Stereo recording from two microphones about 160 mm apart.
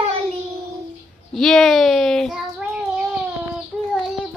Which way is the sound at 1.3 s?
Centre (ahead or behind).